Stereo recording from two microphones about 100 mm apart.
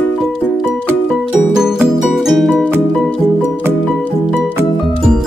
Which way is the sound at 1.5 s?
5° right (ahead or behind).